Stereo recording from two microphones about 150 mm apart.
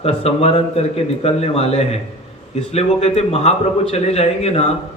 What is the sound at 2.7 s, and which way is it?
Speech, 45° left (ahead or behind).